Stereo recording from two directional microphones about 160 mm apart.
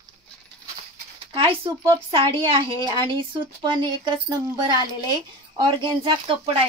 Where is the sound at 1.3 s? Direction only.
35° right (ahead or behind).